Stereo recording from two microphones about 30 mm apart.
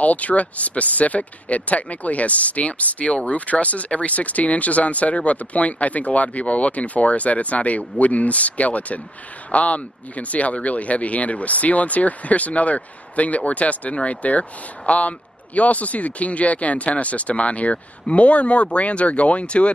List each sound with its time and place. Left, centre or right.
0.0 s speech: left